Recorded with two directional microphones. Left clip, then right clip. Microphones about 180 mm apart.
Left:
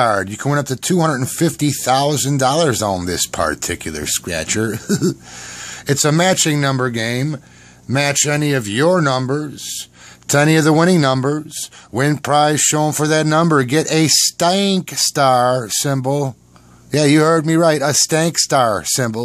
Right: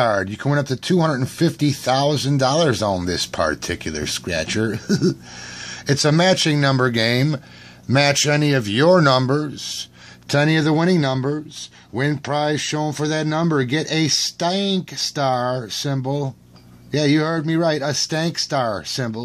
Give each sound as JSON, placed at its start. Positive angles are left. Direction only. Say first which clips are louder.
{"t": 0.0, "sound": "speech", "louder": "left 3 dB", "side_deg": 20}
{"t": 10.2, "sound": "speech", "louder": "left 5 dB", "side_deg": 30}